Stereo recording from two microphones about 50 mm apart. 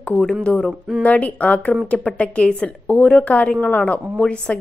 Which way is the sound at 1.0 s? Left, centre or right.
Left.